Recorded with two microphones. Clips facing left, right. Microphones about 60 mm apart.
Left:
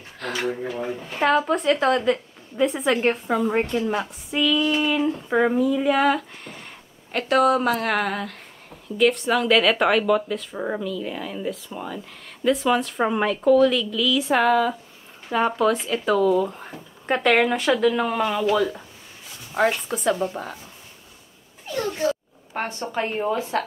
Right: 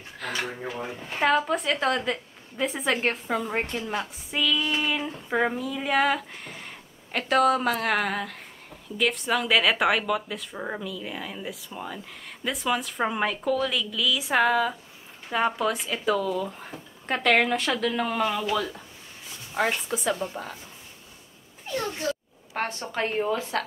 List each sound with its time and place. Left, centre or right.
0.2 s a woman's voice: centre
23.2 s speech: left